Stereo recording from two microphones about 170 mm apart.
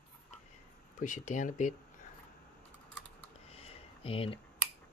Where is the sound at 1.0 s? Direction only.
45° left (ahead or behind).